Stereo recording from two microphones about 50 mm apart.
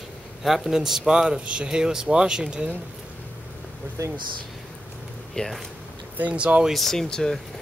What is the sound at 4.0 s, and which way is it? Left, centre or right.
Speech, right.